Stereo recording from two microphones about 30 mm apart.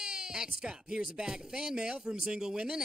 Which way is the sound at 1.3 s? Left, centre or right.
Right.